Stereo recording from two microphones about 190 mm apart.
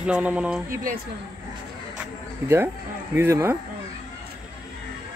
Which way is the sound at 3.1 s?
15° right (ahead or behind).